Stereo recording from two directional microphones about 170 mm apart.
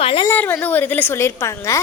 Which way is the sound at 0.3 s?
15° left (ahead or behind).